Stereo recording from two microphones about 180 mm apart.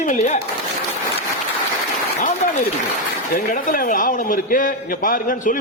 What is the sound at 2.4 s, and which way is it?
A man's voice, 45° left (ahead or behind).